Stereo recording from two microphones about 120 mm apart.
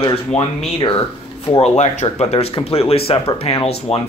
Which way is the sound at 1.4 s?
60° left (ahead or behind).